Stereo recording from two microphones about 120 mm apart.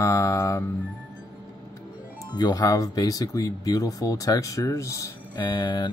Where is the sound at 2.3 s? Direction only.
30° left (ahead or behind).